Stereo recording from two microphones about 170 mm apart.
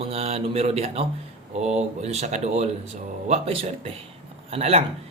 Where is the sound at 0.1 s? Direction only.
35° right (ahead or behind).